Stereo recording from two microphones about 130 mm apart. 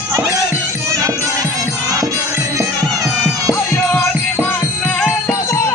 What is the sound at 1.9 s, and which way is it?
Music, 25° right (ahead or behind).